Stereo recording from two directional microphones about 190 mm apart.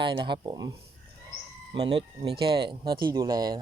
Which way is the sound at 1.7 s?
25° right (ahead or behind).